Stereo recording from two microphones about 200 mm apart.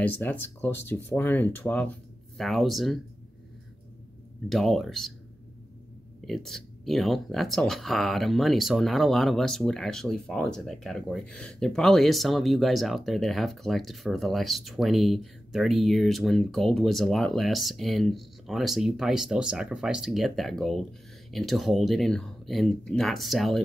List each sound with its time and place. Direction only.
0.0 s speech: 10° left (ahead or behind)
4.5 s speech: centre (ahead or behind)
6.2 s speech: centre (ahead or behind)